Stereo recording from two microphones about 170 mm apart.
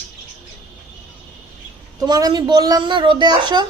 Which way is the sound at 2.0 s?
20° right (ahead or behind).